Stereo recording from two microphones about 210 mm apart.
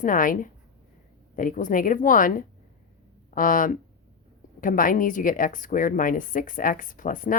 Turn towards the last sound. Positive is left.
turn(degrees=40)  # may be behind; listen again after turning